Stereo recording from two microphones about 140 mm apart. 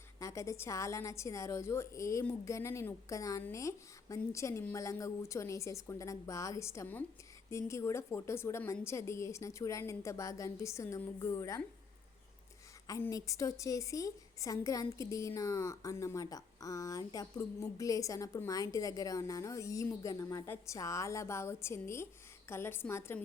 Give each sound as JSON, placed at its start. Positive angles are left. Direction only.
{"t": 0.2, "sound": "a woman's voice", "side_deg": 20}
{"t": 12.9, "sound": "a woman's voice", "side_deg": 25}